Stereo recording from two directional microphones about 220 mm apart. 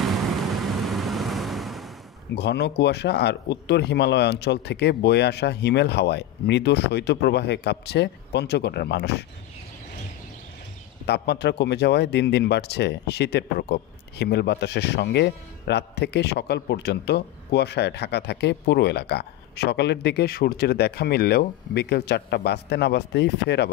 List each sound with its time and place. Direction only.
0.0 s vehicle: centre (ahead or behind)
2.3 s speech: 50° left (ahead or behind)
11.1 s speech: 50° left (ahead or behind)